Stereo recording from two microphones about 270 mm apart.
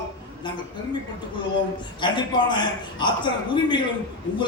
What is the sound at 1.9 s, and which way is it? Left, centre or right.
A man's voice, centre.